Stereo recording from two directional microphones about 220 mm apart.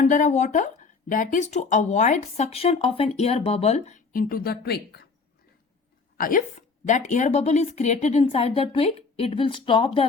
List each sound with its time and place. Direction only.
0.0 s speech: 35° left (ahead or behind)
6.1 s a woman's voice: 40° left (ahead or behind)